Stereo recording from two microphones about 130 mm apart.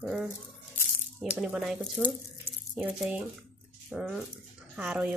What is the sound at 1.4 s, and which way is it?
A woman's voice, 5° right (ahead or behind).